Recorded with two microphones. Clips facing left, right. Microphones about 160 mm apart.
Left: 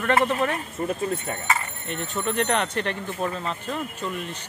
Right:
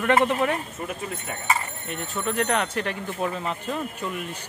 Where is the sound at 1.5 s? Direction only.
5° right (ahead or behind).